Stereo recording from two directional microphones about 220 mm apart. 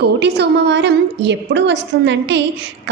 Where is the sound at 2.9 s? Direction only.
55° right (ahead or behind).